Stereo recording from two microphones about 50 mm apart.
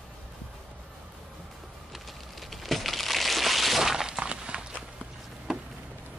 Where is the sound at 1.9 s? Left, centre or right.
Centre.